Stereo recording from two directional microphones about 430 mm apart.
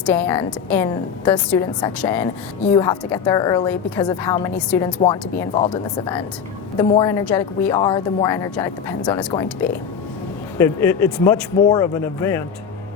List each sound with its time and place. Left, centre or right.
0.0 s a woman's voice: centre